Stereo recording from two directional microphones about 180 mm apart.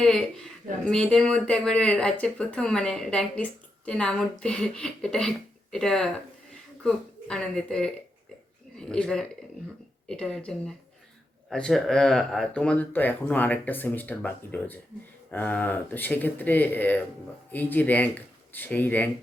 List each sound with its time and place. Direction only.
0.0 s a man's voice: 5° left (ahead or behind)